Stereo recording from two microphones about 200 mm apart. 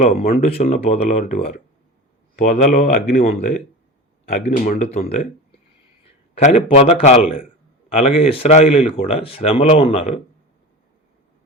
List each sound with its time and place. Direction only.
0.0 s speech: 35° left (ahead or behind)
4.4 s speech: 35° left (ahead or behind)
6.4 s speech: 30° left (ahead or behind)